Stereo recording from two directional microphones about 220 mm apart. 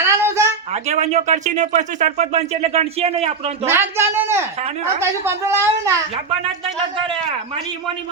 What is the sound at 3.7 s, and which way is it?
Speech, 10° right (ahead or behind).